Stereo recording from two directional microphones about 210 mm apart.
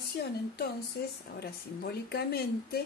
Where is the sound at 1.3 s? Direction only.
50° left (ahead or behind).